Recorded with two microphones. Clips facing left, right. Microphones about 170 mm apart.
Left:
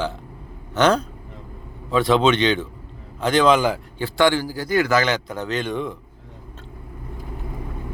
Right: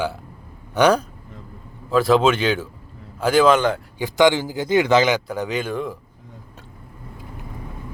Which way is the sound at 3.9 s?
15° right (ahead or behind).